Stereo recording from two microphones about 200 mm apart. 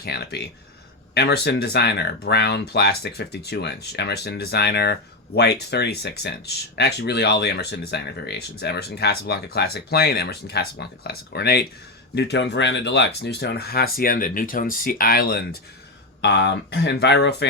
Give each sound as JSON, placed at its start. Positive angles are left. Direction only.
{"t": 0.0, "sound": "speech", "side_deg": 55}